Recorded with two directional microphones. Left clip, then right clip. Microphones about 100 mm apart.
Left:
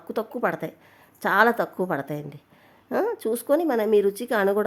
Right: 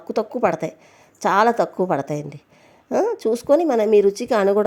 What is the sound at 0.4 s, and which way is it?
Speech, 35° right (ahead or behind).